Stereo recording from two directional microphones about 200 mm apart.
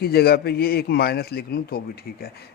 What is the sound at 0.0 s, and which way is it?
Speech, 50° left (ahead or behind).